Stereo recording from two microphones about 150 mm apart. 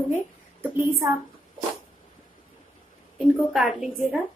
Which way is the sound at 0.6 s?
15° right (ahead or behind).